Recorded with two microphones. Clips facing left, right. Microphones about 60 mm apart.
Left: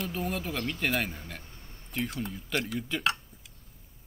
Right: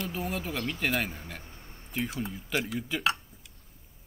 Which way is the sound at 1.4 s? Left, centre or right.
Centre.